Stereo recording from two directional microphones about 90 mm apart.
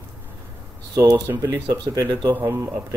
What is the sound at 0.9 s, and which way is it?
Speech, 45° right (ahead or behind).